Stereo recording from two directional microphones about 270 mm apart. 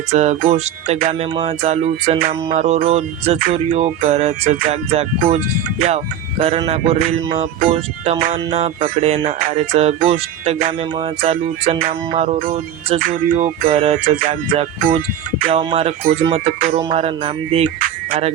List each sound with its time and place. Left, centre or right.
0.1 s music: right
6.4 s music: right